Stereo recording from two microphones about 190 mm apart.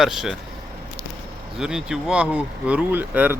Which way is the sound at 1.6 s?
5° right (ahead or behind).